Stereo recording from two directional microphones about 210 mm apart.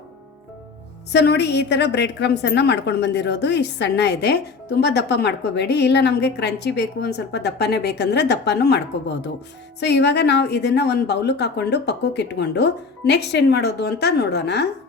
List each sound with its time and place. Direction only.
1.1 s a woman's voice: 55° left (ahead or behind)